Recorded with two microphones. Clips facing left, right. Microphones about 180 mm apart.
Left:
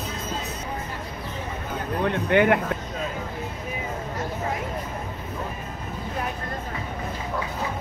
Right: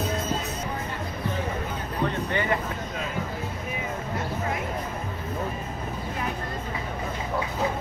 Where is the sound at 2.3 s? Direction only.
60° left (ahead or behind).